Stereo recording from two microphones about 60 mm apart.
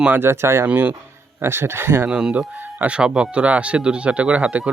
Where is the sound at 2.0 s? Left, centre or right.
Centre.